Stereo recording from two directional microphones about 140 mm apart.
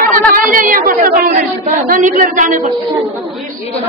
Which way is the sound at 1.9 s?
65° right (ahead or behind).